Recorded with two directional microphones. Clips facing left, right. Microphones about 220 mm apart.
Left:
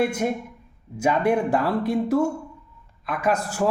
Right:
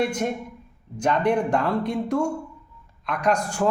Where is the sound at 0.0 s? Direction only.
10° left (ahead or behind).